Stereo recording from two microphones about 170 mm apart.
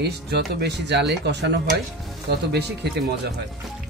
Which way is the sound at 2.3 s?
75° right (ahead or behind).